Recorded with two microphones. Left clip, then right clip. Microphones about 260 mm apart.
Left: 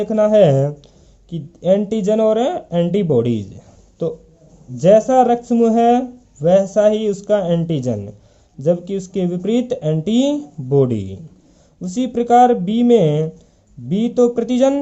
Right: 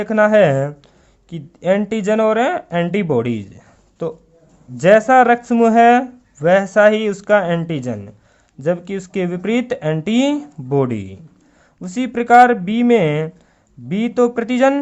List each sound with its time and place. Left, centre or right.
0.0 s speech: centre